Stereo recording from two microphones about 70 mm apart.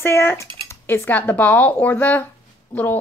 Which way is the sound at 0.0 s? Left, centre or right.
Left.